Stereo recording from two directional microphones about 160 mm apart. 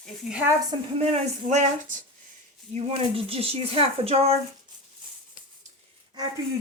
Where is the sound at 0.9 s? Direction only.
45° right (ahead or behind).